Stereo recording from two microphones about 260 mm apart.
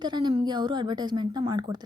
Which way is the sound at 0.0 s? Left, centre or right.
Centre.